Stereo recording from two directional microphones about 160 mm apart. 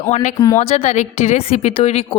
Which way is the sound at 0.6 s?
45° left (ahead or behind).